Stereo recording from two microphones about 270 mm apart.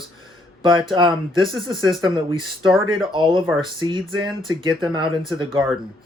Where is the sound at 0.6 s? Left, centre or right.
Centre.